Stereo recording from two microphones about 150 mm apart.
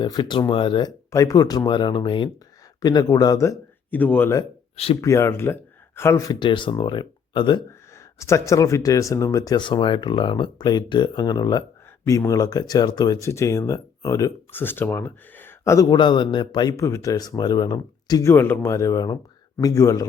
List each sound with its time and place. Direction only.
0.0 s speech: 30° left (ahead or behind)
6.5 s speech: 35° left (ahead or behind)
8.2 s speech: 20° left (ahead or behind)
18.3 s speech: 15° left (ahead or behind)